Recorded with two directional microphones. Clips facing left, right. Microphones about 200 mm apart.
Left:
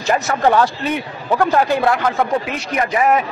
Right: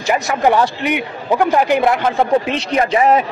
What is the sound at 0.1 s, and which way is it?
A man's voice, 15° right (ahead or behind).